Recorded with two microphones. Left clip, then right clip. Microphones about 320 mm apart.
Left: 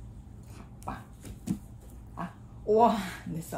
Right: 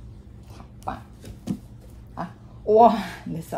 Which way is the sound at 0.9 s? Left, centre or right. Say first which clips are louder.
Right 7 dB; right.